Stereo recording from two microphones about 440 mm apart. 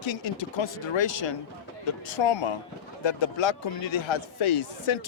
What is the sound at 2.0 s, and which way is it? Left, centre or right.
Speech, left.